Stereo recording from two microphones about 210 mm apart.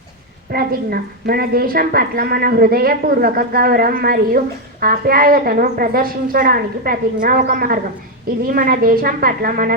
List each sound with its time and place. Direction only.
0.5 s a woman's voice: 45° right (ahead or behind)